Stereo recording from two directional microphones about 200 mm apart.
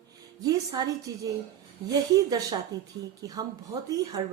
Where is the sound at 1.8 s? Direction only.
20° right (ahead or behind).